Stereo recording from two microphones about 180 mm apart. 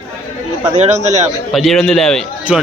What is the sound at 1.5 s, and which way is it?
A man's voice, centre (ahead or behind).